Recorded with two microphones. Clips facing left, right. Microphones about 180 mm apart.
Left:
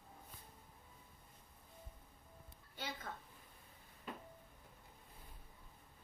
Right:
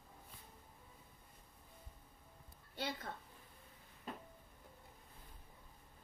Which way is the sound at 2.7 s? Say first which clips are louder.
Right 4 dB; 65° right (ahead or behind).